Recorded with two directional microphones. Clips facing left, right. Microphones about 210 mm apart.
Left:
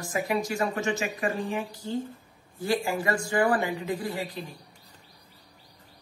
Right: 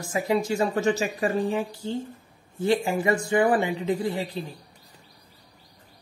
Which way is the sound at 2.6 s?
20° right (ahead or behind).